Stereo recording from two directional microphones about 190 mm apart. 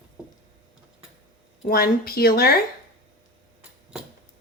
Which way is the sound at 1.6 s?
50° left (ahead or behind).